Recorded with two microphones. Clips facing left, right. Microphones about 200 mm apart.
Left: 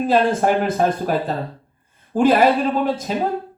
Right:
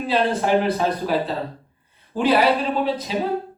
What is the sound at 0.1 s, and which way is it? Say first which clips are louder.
A woman's voice: left 1 dB; 45° left (ahead or behind).